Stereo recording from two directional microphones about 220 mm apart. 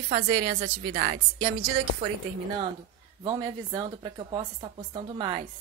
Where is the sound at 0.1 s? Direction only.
30° right (ahead or behind).